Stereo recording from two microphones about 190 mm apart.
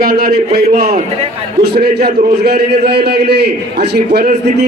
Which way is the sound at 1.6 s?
55° right (ahead or behind).